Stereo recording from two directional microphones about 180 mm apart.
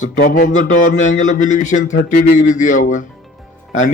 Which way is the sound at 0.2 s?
50° left (ahead or behind).